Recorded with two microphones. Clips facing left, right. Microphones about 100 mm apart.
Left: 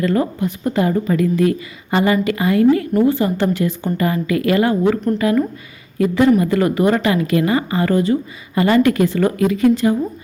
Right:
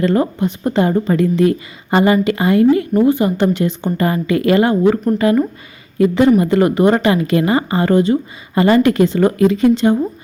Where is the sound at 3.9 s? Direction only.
35° right (ahead or behind).